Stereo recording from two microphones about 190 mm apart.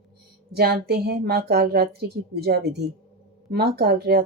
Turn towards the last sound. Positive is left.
turn(degrees=-60)  # may be behind; listen again after turning